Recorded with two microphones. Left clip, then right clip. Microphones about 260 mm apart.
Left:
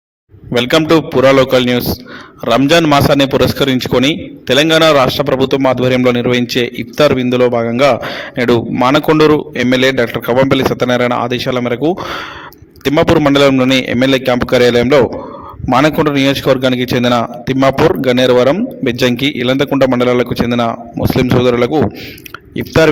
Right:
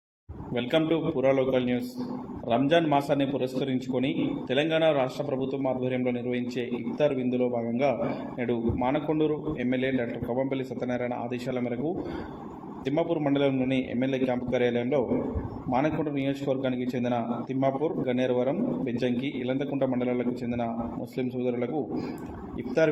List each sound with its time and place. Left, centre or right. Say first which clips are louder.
0.5 s a man's voice: left 16 dB; left